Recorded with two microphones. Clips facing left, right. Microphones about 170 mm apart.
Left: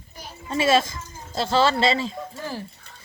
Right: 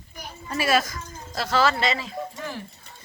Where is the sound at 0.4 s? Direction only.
25° left (ahead or behind).